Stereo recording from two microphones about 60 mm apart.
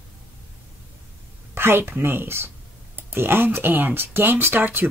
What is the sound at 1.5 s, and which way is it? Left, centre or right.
Speech, right.